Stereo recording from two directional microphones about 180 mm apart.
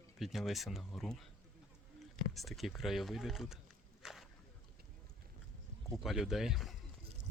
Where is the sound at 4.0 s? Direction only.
Centre (ahead or behind).